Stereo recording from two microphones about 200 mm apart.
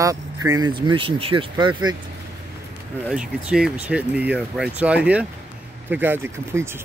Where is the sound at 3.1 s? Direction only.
5° right (ahead or behind).